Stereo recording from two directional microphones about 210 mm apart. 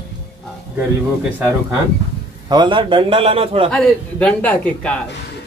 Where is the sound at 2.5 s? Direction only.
20° right (ahead or behind).